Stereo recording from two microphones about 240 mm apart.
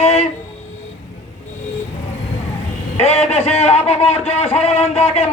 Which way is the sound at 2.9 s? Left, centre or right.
Left.